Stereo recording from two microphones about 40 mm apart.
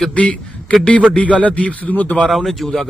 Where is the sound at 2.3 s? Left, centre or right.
Centre.